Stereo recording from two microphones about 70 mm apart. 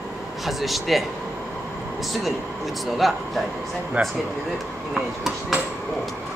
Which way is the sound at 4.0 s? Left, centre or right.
Right.